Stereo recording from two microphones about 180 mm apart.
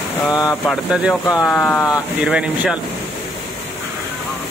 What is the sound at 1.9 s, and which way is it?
Speech, 5° right (ahead or behind).